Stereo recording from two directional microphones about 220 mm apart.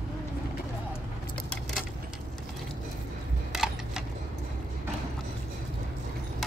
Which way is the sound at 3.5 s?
Centre (ahead or behind).